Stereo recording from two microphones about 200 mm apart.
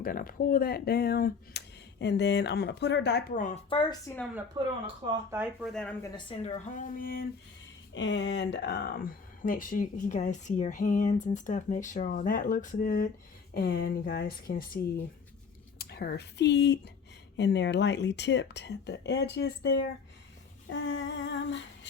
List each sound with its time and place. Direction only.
0.0 s speech: 45° left (ahead or behind)
3.7 s speech: 25° left (ahead or behind)
4.6 s speech: 25° right (ahead or behind)
5.3 s speech: 5° right (ahead or behind)
6.0 s speech: 25° left (ahead or behind); by 7.3 s 45° left (ahead or behind)
7.9 s speech: 65° left (ahead or behind); by 14.8 s 45° left (ahead or behind)
15.8 s speech: 50° left (ahead or behind)